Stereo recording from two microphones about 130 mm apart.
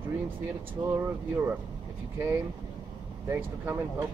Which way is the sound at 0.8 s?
15° right (ahead or behind).